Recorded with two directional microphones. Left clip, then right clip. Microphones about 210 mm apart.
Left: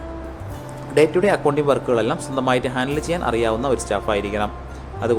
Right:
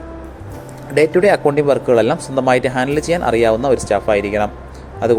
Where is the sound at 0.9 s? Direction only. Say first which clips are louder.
Right 4 dB; 20° right (ahead or behind).